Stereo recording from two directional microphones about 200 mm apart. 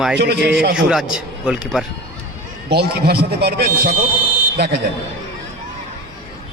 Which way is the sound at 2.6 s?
55° right (ahead or behind).